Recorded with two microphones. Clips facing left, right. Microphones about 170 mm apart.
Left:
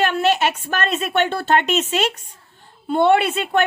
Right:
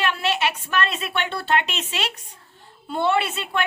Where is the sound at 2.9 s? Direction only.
60° left (ahead or behind).